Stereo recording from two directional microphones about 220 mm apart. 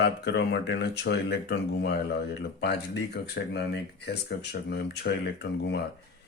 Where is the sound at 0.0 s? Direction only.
50° left (ahead or behind).